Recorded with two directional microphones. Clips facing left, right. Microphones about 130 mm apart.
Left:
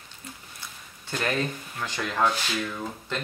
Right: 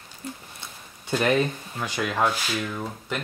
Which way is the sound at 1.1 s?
20° right (ahead or behind).